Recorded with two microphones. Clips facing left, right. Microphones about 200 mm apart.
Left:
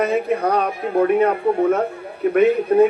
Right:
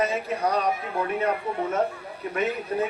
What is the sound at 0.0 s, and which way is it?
A man's voice, 55° left (ahead or behind).